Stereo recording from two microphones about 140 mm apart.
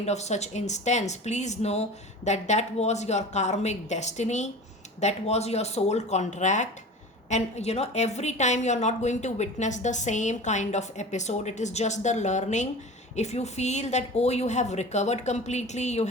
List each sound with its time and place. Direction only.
0.0 s a woman's voice: 55° left (ahead or behind)